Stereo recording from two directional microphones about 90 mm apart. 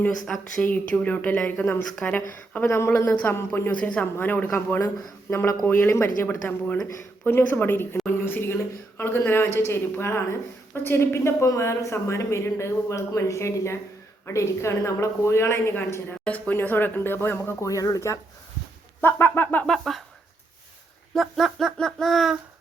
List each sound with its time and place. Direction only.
0.1 s a sound: 5° left (ahead or behind)
0.6 s speech: 15° left (ahead or behind)
1.9 s speech: 5° left (ahead or behind)
2.1 s speech: 20° left (ahead or behind)
3.7 s a woman's voice: 15° left (ahead or behind)
16.2 s speech: 20° left (ahead or behind)
17.7 s speech: 40° left (ahead or behind)
19.0 s speech: 20° left (ahead or behind)
19.6 s a sound: 5° left (ahead or behind)
21.2 s a sound: centre (ahead or behind)